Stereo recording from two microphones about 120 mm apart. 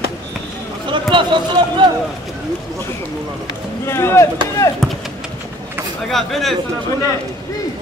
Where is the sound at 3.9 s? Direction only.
20° left (ahead or behind).